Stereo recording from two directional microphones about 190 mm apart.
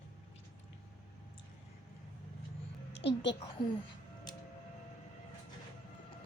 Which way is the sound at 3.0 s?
70° left (ahead or behind).